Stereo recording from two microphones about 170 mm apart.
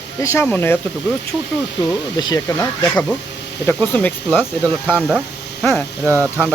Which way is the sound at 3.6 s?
10° left (ahead or behind).